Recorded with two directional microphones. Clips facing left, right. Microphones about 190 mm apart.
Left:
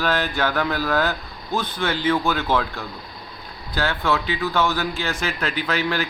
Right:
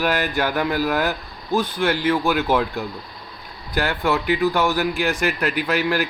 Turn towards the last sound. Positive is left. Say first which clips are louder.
# right 3 dB
turn(degrees=-10)  # may be behind; listen again after turning